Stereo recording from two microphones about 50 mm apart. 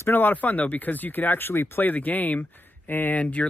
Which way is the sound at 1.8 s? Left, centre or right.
Left.